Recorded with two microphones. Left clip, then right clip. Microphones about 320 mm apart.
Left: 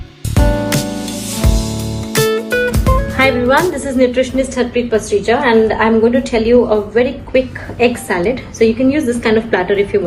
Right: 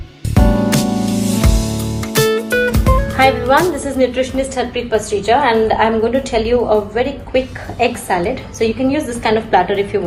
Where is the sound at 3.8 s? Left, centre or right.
Right.